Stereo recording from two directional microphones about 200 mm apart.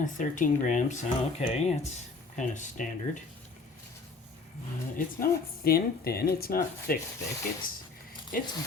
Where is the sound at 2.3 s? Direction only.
40° left (ahead or behind).